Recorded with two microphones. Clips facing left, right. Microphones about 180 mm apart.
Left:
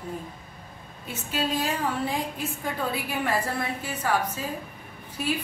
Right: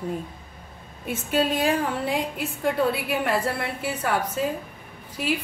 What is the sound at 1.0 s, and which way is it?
Speech, 55° right (ahead or behind).